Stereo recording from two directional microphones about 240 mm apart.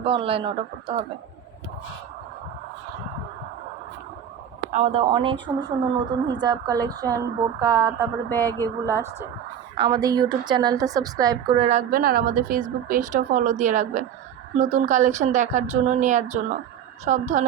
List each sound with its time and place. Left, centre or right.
0.0 s speech: right
4.7 s a woman's voice: right
8.3 s speech: centre
8.5 s a woman's voice: centre; by 17.4 s right